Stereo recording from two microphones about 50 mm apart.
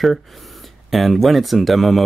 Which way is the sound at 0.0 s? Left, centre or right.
Centre.